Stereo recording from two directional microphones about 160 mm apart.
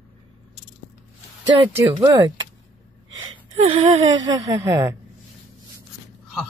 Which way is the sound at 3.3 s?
35° right (ahead or behind).